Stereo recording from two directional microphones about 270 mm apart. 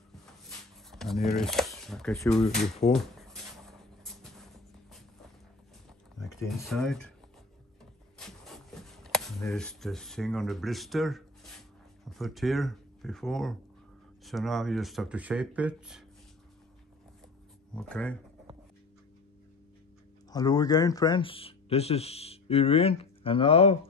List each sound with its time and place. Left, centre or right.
0.5 s a sound: centre
6.4 s speech: centre
8.2 s a sound: centre
12.0 s speech: centre
17.7 s speech: centre
20.2 s speech: centre